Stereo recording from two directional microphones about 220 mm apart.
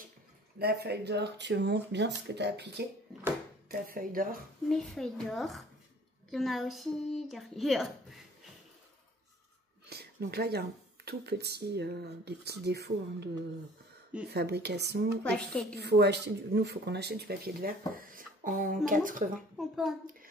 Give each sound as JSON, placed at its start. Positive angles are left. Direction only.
{"t": 0.6, "sound": "speech", "side_deg": -45}
{"t": 4.6, "sound": "speech", "side_deg": 0}
{"t": 9.8, "sound": "a sound", "side_deg": -45}
{"t": 11.1, "sound": "speech", "side_deg": -45}
{"t": 14.3, "sound": "speech", "side_deg": -50}
{"t": 15.3, "sound": "speech", "side_deg": 0}
{"t": 15.7, "sound": "speech", "side_deg": -50}
{"t": 19.5, "sound": "speech", "side_deg": 0}